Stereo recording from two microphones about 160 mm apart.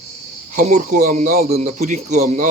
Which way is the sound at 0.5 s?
55° right (ahead or behind).